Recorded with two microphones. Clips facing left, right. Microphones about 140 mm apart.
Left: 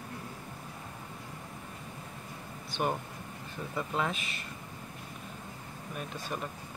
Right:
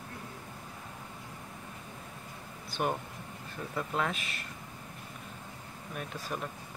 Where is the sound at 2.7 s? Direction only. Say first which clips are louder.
Even; centre (ahead or behind).